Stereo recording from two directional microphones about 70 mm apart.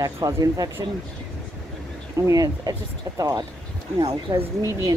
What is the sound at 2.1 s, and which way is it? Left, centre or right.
Speech, right.